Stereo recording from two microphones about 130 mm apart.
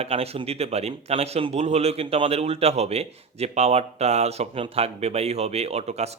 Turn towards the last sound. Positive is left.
turn(degrees=-55)  # may be behind; listen again after turning